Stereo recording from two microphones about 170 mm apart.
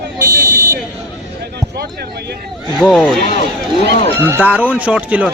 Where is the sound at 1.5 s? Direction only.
70° right (ahead or behind).